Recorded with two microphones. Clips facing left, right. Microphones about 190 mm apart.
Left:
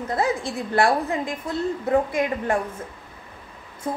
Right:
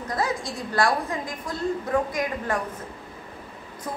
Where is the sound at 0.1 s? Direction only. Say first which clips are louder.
Left 3 dB; 25° left (ahead or behind).